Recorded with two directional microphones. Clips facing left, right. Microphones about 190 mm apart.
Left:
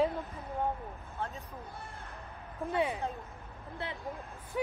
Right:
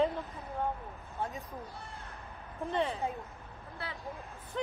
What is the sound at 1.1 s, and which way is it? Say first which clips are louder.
Speech: right 2 dB; 15° right (ahead or behind).